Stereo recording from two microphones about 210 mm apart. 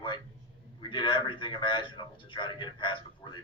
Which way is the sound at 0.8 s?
25° left (ahead or behind).